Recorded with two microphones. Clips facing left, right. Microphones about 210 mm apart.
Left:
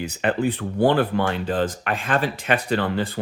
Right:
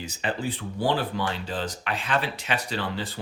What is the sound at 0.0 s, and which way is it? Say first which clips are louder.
Speech: left 7 dB; 60° left (ahead or behind).